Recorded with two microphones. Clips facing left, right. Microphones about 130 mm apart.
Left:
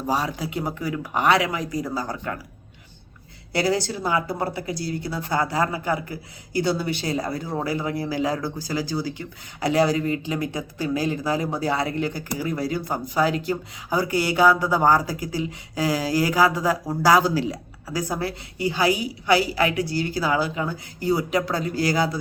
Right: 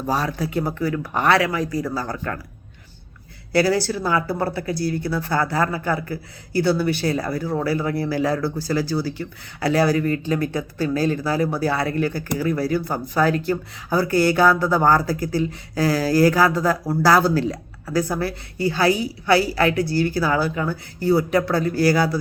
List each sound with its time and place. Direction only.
0.1 s speech: 15° left (ahead or behind)
3.5 s speech: 20° left (ahead or behind)